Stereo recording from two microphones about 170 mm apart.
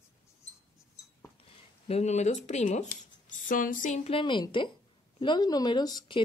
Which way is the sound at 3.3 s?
50° left (ahead or behind).